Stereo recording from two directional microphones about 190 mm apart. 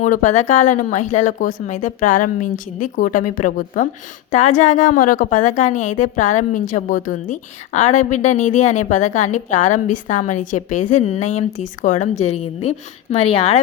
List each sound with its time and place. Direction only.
0.0 s a woman's voice: 40° left (ahead or behind)